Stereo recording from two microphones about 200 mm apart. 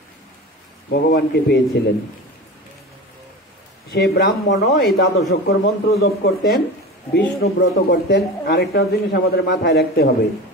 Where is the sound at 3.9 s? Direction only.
50° left (ahead or behind).